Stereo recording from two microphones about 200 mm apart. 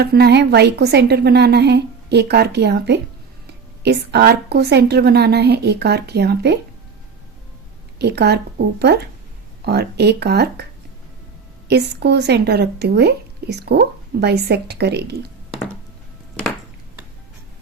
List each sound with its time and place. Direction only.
0.0 s speech: 55° right (ahead or behind)
7.9 s speech: 55° right (ahead or behind)
11.7 s speech: 55° right (ahead or behind)